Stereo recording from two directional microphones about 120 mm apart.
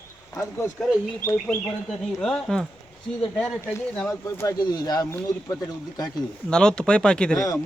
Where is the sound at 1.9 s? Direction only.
5° left (ahead or behind).